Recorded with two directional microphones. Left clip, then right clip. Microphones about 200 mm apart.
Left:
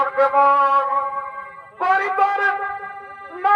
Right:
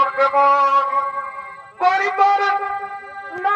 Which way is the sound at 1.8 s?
20° left (ahead or behind).